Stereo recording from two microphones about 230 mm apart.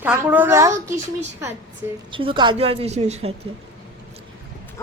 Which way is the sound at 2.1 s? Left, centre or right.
Right.